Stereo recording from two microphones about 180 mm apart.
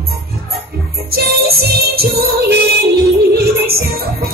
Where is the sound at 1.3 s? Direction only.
60° right (ahead or behind).